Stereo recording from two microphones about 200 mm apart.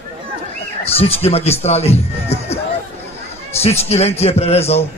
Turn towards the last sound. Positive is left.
turn(degrees=30)  # may be behind; listen again after turning